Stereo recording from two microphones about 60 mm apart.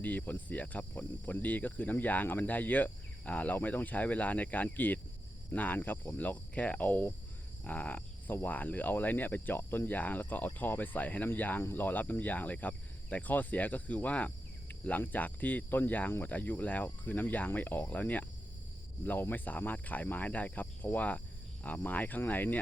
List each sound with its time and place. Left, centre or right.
0.0 s cricket: left